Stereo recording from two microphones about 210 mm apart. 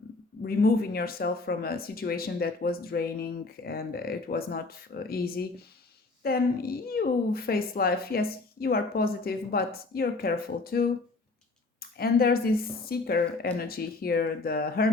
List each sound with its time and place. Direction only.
0.4 s speech: 45° left (ahead or behind)